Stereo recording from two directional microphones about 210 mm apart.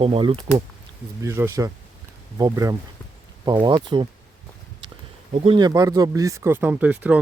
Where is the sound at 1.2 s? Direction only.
10° right (ahead or behind).